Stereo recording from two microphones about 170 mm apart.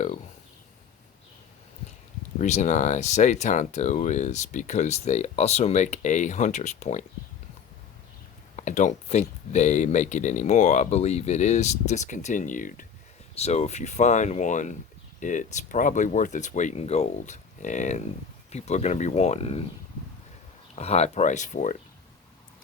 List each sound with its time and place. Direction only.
2.4 s speech: 45° left (ahead or behind)
8.5 s speech: 45° left (ahead or behind)
13.3 s speech: 40° left (ahead or behind)
20.7 s speech: 40° left (ahead or behind)